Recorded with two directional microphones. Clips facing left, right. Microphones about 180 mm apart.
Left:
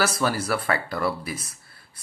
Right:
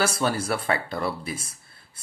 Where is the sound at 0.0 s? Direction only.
25° right (ahead or behind).